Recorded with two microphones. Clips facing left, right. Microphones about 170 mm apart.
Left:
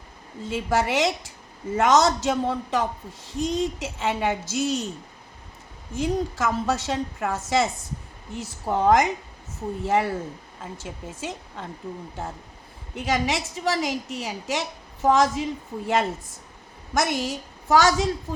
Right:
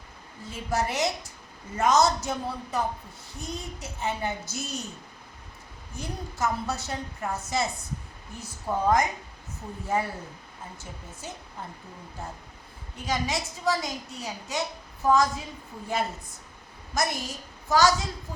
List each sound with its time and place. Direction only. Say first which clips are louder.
0.4 s speech: left 5 dB; 90° left
5.9 s speech: left 12 dB; 90° left
16.9 s speech: left 5 dB; 90° left